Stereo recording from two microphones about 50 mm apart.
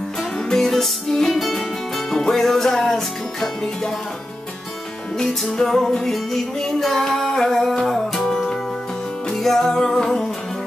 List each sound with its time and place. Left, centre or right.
0.5 s music: centre
5.4 s music: centre